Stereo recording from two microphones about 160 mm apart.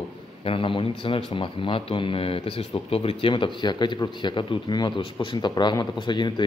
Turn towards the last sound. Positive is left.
turn(degrees=30)  # may be behind; listen again after turning